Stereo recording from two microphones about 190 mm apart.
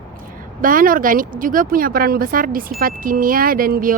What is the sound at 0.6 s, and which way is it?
A woman's voice, 45° right (ahead or behind).